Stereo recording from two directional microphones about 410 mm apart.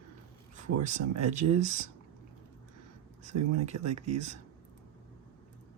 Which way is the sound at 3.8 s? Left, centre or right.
Centre.